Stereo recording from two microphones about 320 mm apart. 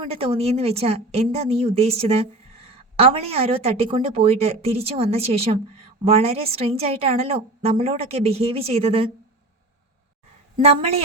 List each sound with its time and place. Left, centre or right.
0.0 s a woman's voice: centre
10.6 s a woman's voice: centre